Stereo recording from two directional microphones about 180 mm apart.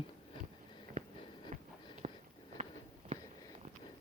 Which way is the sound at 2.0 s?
40° right (ahead or behind).